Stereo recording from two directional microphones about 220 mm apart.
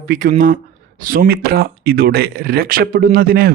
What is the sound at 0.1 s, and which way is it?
Speech, 40° right (ahead or behind).